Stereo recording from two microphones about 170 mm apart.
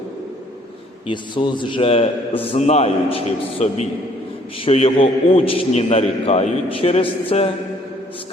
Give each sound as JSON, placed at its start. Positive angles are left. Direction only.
{"t": 1.0, "sound": "a man's voice", "side_deg": 30}